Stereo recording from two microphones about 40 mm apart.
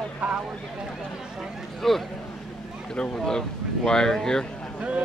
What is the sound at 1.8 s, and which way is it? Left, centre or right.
Speech, centre.